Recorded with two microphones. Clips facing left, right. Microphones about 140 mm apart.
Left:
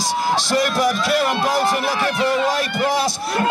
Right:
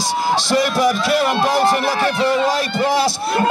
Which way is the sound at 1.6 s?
30° right (ahead or behind).